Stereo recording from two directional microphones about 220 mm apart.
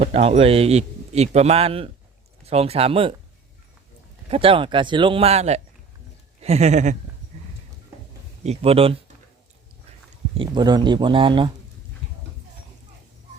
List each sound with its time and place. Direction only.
0.0 s a man's voice: 25° right (ahead or behind)
4.3 s a man's voice: 25° right (ahead or behind)
6.4 s a sound: 30° right (ahead or behind)
8.4 s a man's voice: 25° right (ahead or behind)
10.3 s a man's voice: 20° right (ahead or behind)